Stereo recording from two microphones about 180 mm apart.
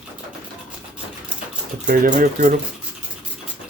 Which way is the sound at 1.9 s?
45° right (ahead or behind).